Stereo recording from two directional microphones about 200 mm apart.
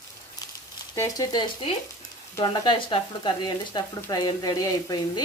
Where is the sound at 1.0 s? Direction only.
15° left (ahead or behind).